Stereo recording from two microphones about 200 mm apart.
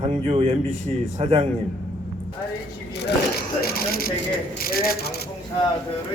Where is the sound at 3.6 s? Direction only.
50° left (ahead or behind).